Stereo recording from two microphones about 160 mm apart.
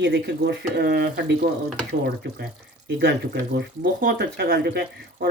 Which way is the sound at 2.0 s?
90° right.